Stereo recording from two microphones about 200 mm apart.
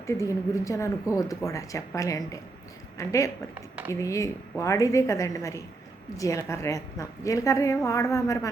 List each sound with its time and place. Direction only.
0.2 s a woman's voice: 15° left (ahead or behind)
3.5 s speech: 10° right (ahead or behind)
4.0 s a woman's voice: 15° left (ahead or behind)